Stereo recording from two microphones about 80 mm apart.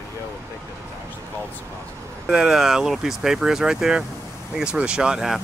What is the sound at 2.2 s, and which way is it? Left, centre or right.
Speech, centre.